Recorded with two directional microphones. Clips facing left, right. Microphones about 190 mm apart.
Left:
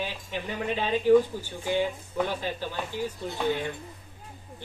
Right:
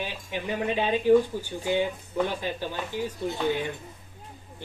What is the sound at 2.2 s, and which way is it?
Speech, 15° right (ahead or behind).